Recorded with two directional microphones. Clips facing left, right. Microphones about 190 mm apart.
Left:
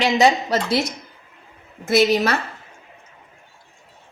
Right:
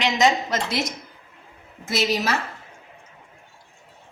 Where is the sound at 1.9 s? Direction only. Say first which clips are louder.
Left 7 dB; 60° left (ahead or behind).